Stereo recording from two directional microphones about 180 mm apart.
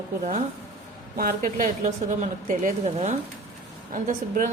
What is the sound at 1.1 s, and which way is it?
A woman's voice, 50° right (ahead or behind).